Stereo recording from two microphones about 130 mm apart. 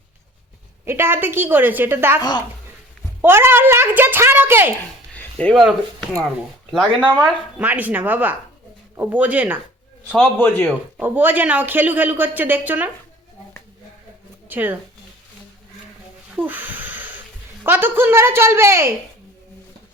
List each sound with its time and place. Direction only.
0.9 s speech: 20° right (ahead or behind)
5.1 s a sound: 10° left (ahead or behind)
5.6 s speech: centre (ahead or behind)
6.8 s speech: 35° right (ahead or behind)
7.6 s speech: 10° right (ahead or behind)
10.2 s a man's voice: 15° left (ahead or behind)
11.0 s speech: 15° right (ahead or behind)
14.5 s speech: 15° right (ahead or behind)
16.3 s a sound: 15° right (ahead or behind)
17.7 s a woman's voice: 15° right (ahead or behind)